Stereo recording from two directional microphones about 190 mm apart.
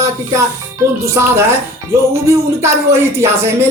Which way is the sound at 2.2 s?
15° right (ahead or behind).